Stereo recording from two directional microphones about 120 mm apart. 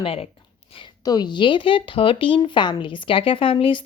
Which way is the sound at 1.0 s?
35° left (ahead or behind).